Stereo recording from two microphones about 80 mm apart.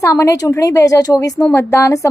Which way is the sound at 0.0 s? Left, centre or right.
Left.